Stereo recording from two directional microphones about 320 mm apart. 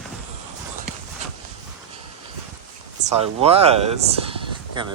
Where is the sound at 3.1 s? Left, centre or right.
Centre.